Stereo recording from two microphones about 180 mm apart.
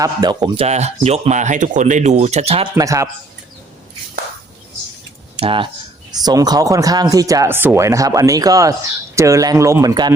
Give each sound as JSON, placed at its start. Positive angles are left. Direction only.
{"t": 0.0, "sound": "speech", "side_deg": -20}
{"t": 2.7, "sound": "a man's voice", "side_deg": -15}
{"t": 5.4, "sound": "speech", "side_deg": -30}